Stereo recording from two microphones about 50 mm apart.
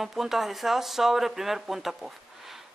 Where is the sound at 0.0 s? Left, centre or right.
Centre.